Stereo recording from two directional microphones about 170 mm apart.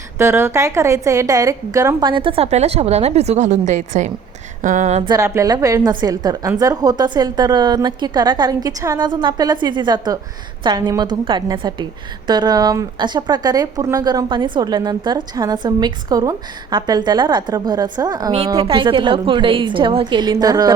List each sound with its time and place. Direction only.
0.2 s speech: 15° right (ahead or behind); by 4.1 s 45° right (ahead or behind)
4.6 s a sound: 45° right (ahead or behind)
5.0 s speech: 20° right (ahead or behind)